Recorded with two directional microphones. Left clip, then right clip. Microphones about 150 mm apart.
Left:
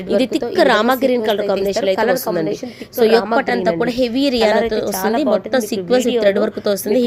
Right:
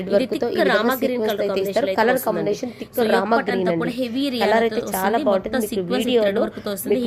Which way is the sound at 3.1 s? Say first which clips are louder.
Left 4 dB; 35° left (ahead or behind).